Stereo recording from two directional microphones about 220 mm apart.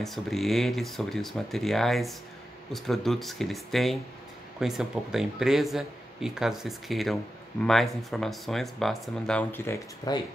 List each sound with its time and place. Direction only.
0.0 s speech: centre (ahead or behind)